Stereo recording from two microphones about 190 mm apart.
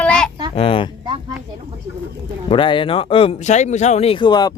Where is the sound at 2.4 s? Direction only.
25° left (ahead or behind).